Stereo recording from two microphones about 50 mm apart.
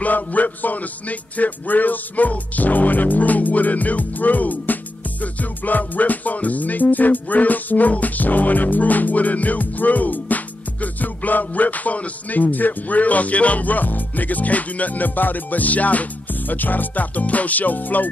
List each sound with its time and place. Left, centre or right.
0.0 s music: left